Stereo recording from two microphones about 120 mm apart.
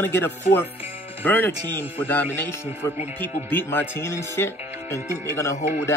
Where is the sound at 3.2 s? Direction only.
15° left (ahead or behind).